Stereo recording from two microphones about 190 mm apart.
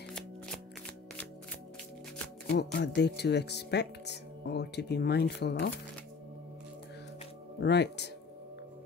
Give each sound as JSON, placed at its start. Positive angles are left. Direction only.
{"t": 2.4, "sound": "speech", "side_deg": 60}
{"t": 7.6, "sound": "speech", "side_deg": 65}